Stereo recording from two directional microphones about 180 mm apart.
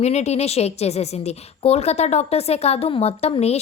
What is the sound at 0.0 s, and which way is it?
A woman's voice, 40° left (ahead or behind).